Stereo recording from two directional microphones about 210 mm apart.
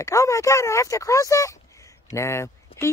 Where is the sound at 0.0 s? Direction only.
15° left (ahead or behind).